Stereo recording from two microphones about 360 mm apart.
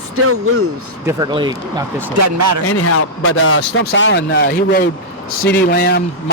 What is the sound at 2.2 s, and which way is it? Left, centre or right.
Speech, right.